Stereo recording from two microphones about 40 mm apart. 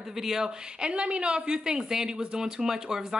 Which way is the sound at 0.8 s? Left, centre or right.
Right.